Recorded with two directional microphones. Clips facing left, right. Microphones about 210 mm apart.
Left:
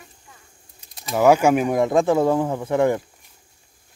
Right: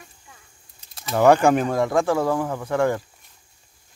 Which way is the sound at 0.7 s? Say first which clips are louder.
Even; 15° left (ahead or behind).